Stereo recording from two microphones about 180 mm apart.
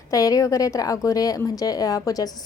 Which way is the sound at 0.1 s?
20° left (ahead or behind).